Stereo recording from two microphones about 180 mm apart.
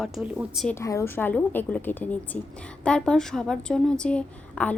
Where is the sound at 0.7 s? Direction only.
15° left (ahead or behind).